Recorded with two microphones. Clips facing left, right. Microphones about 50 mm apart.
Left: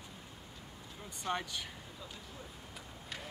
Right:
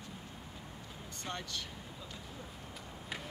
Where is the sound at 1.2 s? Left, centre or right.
Centre.